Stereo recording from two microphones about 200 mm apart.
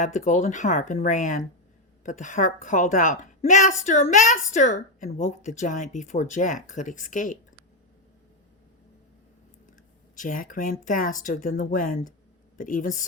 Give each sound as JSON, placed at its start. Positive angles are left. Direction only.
{"t": 0.0, "sound": "speech", "side_deg": 40}
{"t": 10.2, "sound": "speech", "side_deg": 40}